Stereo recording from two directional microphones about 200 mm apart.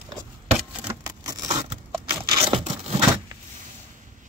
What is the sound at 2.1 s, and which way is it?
Scrape, 25° right (ahead or behind).